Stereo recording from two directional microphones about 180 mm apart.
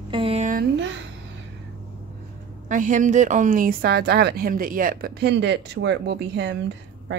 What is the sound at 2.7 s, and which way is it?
Speech, 45° right (ahead or behind).